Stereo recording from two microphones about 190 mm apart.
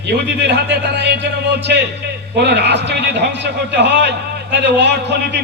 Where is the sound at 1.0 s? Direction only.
65° right (ahead or behind).